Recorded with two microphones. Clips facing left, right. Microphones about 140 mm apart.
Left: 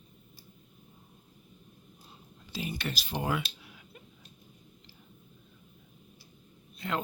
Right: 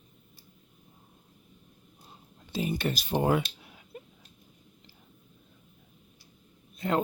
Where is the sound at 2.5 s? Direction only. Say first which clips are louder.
Right 6 dB; 45° right (ahead or behind).